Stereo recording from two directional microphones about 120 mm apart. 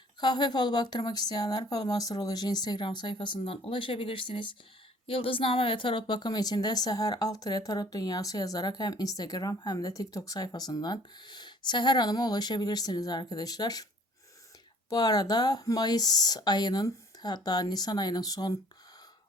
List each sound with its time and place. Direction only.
0.2 s speech: 35° left (ahead or behind)
14.8 s speech: 30° left (ahead or behind)